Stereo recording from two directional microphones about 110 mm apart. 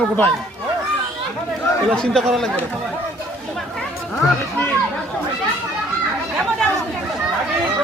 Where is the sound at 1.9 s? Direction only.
5° left (ahead or behind).